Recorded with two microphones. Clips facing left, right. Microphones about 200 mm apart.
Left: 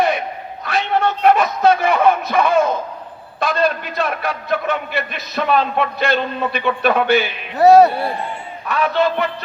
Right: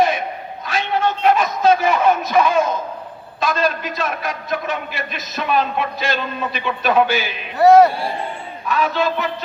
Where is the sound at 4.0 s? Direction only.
60° left (ahead or behind).